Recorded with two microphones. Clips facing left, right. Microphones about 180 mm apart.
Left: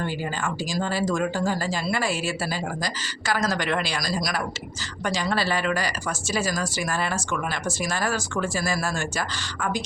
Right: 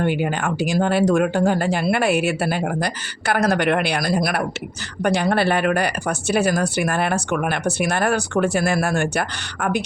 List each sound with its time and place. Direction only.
0.0 s speech: 65° right (ahead or behind)